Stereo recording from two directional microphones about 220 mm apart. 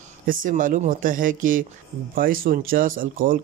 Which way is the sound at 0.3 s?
35° right (ahead or behind).